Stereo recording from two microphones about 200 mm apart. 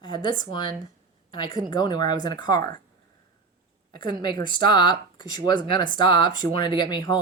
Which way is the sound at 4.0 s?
20° left (ahead or behind).